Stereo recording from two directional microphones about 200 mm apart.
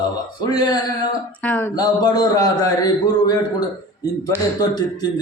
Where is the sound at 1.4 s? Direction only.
10° left (ahead or behind).